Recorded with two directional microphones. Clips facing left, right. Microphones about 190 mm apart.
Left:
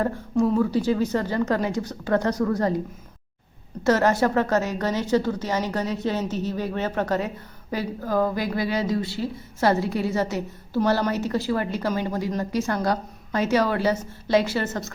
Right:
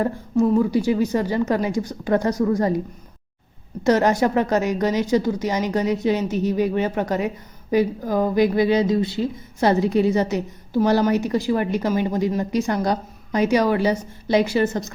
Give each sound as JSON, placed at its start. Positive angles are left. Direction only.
{"t": 0.5, "sound": "a woman's voice", "side_deg": -15}
{"t": 3.8, "sound": "a woman's voice", "side_deg": -15}